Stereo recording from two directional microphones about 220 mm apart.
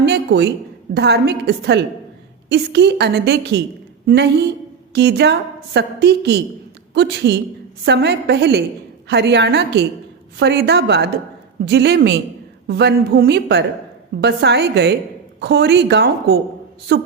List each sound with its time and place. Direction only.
0.0 s a man's voice: 50° right (ahead or behind)